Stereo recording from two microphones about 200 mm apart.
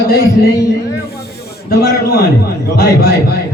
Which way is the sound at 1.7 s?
50° left (ahead or behind).